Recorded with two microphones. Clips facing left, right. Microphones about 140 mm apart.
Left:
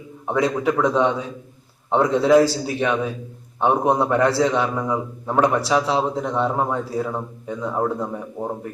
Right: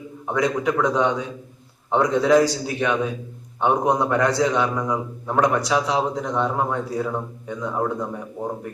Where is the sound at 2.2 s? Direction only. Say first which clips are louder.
Left 2 dB; 5° left (ahead or behind).